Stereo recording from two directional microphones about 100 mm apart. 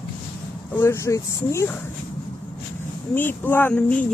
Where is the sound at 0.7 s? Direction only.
25° left (ahead or behind).